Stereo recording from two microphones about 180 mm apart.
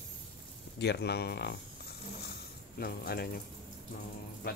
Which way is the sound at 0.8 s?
65° left (ahead or behind).